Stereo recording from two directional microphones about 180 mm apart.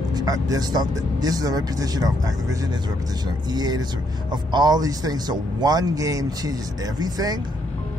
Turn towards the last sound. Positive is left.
turn(degrees=-20)  # may be behind; listen again after turning